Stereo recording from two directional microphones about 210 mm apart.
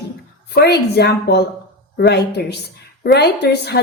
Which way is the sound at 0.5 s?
50° left (ahead or behind).